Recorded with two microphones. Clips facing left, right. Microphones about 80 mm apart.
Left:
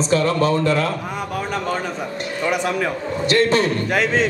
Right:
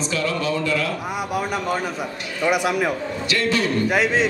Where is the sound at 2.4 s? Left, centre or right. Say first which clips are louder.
Right 1 dB; centre.